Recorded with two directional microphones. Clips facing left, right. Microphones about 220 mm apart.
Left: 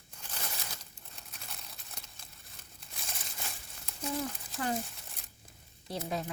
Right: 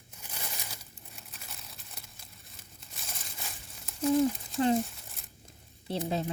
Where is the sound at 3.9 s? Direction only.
Centre (ahead or behind).